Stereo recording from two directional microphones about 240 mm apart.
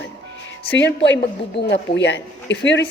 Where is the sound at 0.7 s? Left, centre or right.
Left.